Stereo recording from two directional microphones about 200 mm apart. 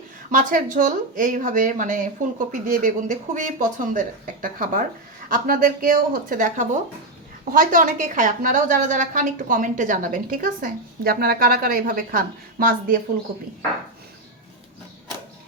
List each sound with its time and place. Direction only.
0.3 s a woman's voice: 40° right (ahead or behind)